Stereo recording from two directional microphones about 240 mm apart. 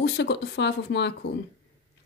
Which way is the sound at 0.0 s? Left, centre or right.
Left.